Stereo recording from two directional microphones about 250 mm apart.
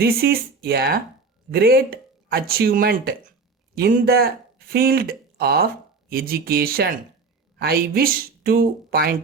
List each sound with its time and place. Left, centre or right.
0.0 s speech: right